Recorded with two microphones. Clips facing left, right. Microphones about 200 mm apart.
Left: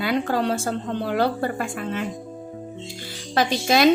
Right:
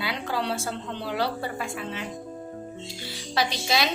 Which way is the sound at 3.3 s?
50° left (ahead or behind).